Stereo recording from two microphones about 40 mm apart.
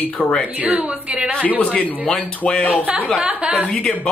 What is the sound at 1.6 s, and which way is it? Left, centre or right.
Speech, left.